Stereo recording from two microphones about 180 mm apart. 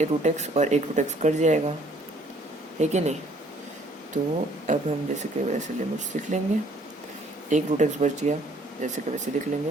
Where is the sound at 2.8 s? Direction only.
40° right (ahead or behind).